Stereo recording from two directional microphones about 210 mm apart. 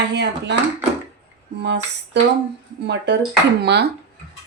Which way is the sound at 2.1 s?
55° right (ahead or behind).